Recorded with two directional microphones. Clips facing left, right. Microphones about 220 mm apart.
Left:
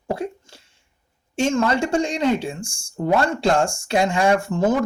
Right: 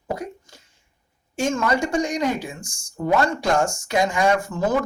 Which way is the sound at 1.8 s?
30° left (ahead or behind).